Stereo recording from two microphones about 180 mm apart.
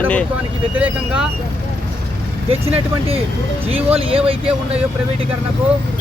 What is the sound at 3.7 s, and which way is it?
Speech, 30° right (ahead or behind).